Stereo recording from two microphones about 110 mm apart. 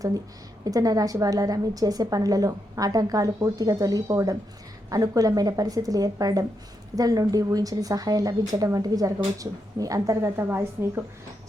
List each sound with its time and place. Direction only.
0.6 s a woman's voice: 35° right (ahead or behind)